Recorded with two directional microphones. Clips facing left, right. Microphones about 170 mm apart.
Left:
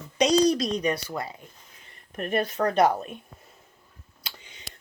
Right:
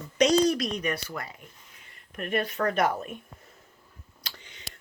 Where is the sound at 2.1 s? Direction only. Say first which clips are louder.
Left 3 dB; 35° left (ahead or behind).